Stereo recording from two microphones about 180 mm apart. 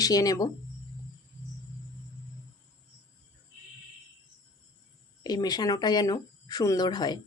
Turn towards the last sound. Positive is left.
turn(degrees=20)  # may be behind; listen again after turning